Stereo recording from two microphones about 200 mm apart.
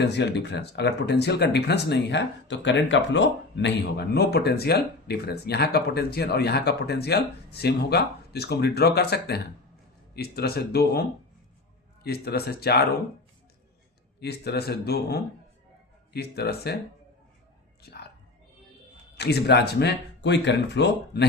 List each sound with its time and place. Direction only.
0.0 s speech: 60° left (ahead or behind)
12.0 s speech: 50° left (ahead or behind)
14.2 s speech: 55° left (ahead or behind)
17.8 s whispering: 55° left (ahead or behind)
19.1 s speech: 55° left (ahead or behind)